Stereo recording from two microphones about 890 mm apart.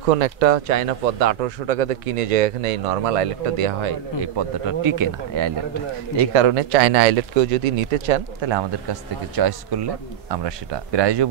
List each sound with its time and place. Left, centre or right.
0.1 s a man's voice: right
4.8 s speech: right
6.3 s a man's voice: right
8.4 s speech: right